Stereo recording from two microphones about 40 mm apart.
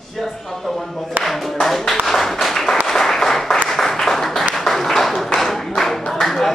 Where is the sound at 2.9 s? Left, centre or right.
Centre.